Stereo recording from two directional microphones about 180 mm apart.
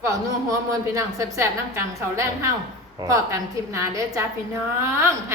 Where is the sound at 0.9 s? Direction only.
15° right (ahead or behind).